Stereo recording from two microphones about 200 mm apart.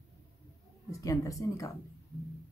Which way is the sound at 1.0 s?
15° left (ahead or behind).